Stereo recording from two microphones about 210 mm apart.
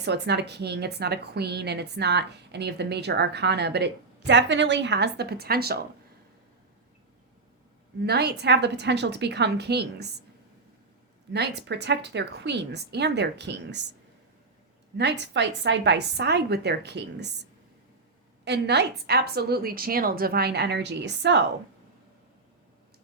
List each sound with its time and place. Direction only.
0.0 s a woman's voice: 55° right (ahead or behind)
8.0 s a woman's voice: 50° right (ahead or behind)
11.3 s a woman's voice: 55° right (ahead or behind)
14.9 s a woman's voice: 55° right (ahead or behind)
18.4 s a woman's voice: 55° right (ahead or behind)